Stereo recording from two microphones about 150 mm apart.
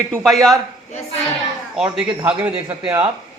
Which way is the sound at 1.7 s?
5° right (ahead or behind).